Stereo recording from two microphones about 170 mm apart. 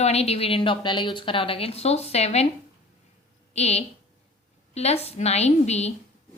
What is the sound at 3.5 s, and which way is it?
A woman's voice, 40° left (ahead or behind).